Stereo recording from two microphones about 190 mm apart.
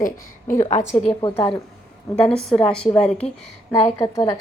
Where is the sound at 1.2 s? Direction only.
25° left (ahead or behind).